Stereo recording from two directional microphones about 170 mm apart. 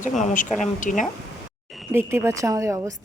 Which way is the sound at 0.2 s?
45° left (ahead or behind).